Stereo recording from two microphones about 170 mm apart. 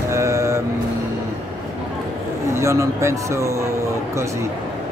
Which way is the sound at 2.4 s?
15° right (ahead or behind).